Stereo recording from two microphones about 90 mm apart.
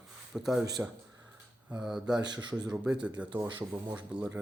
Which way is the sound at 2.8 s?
15° right (ahead or behind).